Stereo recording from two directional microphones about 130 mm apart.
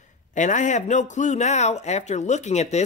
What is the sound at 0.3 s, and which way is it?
Speech, 70° left (ahead or behind).